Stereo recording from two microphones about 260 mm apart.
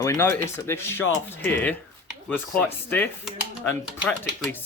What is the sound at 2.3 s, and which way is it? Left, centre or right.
Speech, centre.